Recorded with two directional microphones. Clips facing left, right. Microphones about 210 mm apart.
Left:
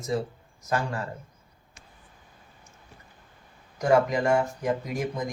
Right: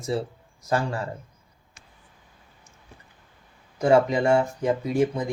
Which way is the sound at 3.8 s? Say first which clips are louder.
Right 3 dB; 30° right (ahead or behind).